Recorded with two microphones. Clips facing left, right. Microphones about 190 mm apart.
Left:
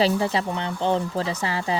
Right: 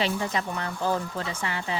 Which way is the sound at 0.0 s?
30° left (ahead or behind).